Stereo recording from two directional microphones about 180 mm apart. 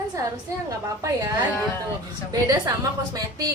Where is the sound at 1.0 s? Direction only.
20° right (ahead or behind).